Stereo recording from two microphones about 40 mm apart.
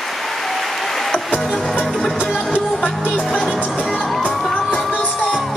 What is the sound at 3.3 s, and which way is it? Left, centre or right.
Music, left.